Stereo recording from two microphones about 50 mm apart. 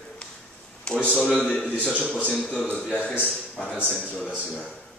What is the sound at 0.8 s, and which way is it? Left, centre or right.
A man's voice, centre.